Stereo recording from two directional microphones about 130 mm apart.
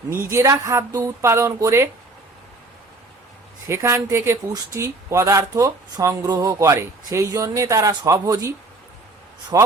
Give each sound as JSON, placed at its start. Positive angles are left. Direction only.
{"t": 0.1, "sound": "speech", "side_deg": -20}
{"t": 3.7, "sound": "speech", "side_deg": -20}